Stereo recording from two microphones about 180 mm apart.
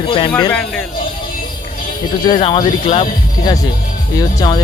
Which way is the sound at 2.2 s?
25° left (ahead or behind).